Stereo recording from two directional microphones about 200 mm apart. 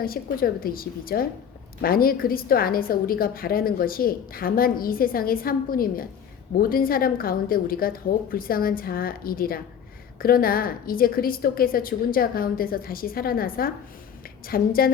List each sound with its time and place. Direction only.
0.0 s a woman's voice: 45° left (ahead or behind)